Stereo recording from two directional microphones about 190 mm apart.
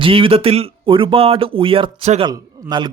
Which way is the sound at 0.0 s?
30° right (ahead or behind).